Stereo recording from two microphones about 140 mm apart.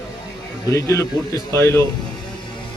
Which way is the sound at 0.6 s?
25° left (ahead or behind).